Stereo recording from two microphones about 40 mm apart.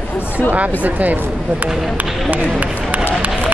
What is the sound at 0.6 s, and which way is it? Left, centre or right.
Speech, right.